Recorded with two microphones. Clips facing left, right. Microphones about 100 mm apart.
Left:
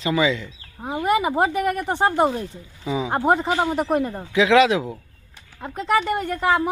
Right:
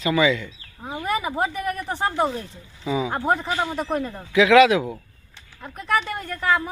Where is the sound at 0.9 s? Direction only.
20° left (ahead or behind).